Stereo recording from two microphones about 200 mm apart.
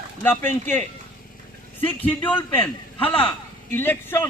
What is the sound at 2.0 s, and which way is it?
Speech, 10° left (ahead or behind).